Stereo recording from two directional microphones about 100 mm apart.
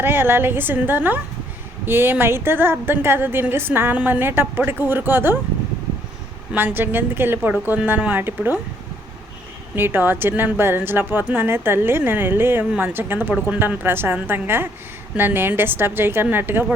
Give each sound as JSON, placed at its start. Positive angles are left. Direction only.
{"t": 0.0, "sound": "a woman's voice", "side_deg": -20}
{"t": 6.5, "sound": "a woman's voice", "side_deg": -20}
{"t": 9.7, "sound": "a woman's voice", "side_deg": -20}